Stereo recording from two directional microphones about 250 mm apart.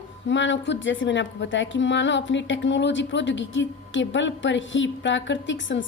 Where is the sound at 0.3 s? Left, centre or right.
Left.